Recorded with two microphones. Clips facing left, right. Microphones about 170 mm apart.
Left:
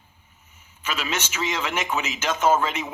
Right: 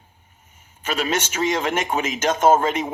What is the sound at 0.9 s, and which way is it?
A man's voice, 45° right (ahead or behind).